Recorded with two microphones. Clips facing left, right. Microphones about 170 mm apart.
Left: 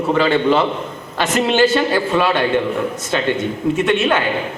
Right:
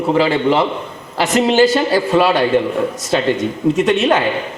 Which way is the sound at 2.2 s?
35° right (ahead or behind).